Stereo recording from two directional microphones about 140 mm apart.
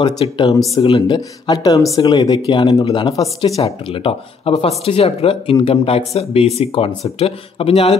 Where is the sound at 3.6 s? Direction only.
40° left (ahead or behind).